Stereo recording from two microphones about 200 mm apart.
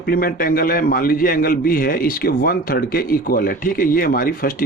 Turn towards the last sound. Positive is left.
turn(degrees=45)  # may be behind; listen again after turning